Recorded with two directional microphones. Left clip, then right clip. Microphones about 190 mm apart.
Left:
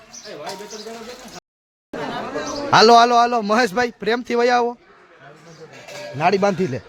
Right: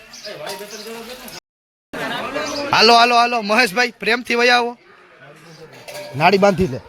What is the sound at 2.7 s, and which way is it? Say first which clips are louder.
A man's voice: even; 20° left (ahead or behind).